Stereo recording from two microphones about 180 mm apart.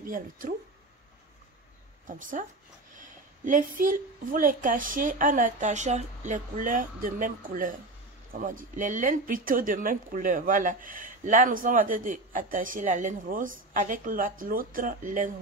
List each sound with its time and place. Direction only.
0.0 s speech: 50° right (ahead or behind)
2.0 s speech: 45° right (ahead or behind)